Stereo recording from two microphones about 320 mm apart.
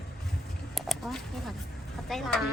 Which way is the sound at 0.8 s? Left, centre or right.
Centre.